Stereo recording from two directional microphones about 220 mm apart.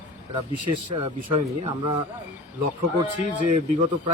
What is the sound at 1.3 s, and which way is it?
Speech, 30° right (ahead or behind).